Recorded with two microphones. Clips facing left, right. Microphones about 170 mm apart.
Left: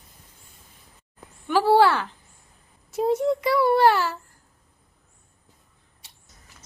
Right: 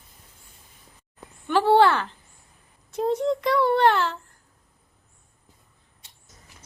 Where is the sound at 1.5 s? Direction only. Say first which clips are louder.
Even; 10° left (ahead or behind).